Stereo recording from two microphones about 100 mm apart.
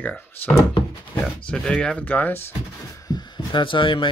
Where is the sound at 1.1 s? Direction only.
5° left (ahead or behind); by 3.0 s 20° left (ahead or behind).